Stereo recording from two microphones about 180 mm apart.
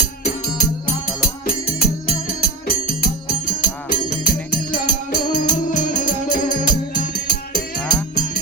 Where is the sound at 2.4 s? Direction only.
55° left (ahead or behind).